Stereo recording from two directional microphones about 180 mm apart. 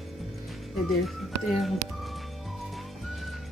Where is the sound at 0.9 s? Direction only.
Centre (ahead or behind).